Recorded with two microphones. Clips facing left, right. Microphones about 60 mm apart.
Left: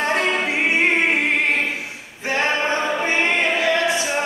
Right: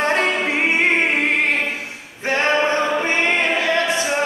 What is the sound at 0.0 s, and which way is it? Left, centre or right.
Music, right.